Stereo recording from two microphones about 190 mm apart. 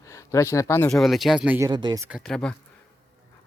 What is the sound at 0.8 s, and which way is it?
Speech, centre (ahead or behind).